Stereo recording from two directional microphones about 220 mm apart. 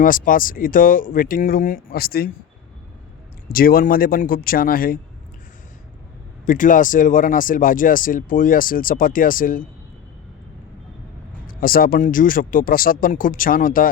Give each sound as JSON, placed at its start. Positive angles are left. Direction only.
{"t": 0.0, "sound": "speech", "side_deg": 40}
{"t": 3.5, "sound": "speech", "side_deg": 40}
{"t": 6.4, "sound": "speech", "side_deg": 35}
{"t": 11.4, "sound": "speech", "side_deg": 40}